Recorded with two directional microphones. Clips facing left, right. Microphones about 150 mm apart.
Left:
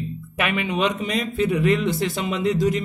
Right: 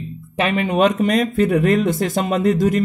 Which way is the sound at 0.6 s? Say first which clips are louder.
Right 7 dB; 50° right (ahead or behind).